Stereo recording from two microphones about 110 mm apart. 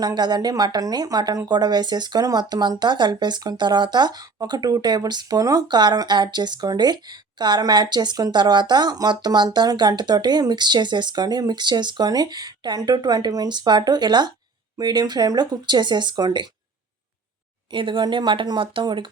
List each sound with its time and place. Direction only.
0.0 s a woman's voice: 40° right (ahead or behind)
17.7 s speech: 50° right (ahead or behind)